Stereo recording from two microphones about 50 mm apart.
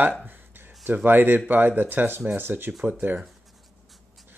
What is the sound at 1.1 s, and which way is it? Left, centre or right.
Speech, right.